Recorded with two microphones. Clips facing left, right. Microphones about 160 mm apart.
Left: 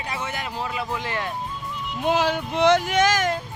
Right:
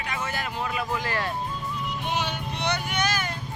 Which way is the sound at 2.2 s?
90° left.